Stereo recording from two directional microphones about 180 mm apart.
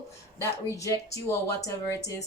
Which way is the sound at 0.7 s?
20° left (ahead or behind).